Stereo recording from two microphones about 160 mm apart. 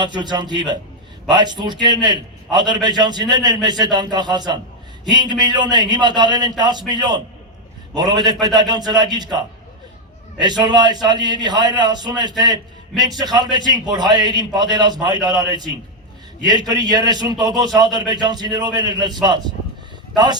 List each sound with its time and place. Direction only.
0.0 s a man's voice: 25° right (ahead or behind)
10.6 s a man's voice: 25° right (ahead or behind)